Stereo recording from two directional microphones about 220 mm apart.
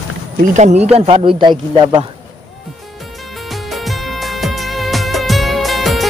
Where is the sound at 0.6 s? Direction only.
30° right (ahead or behind).